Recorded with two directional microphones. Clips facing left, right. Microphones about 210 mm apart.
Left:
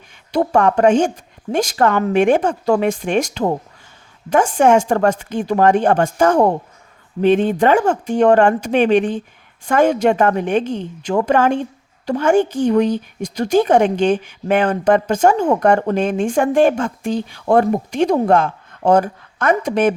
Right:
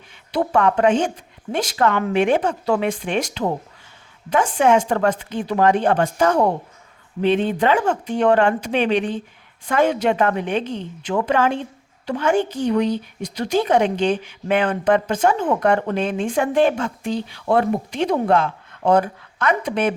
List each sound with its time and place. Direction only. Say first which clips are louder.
0.3 s a woman's voice: left 3 dB; 45° left (ahead or behind)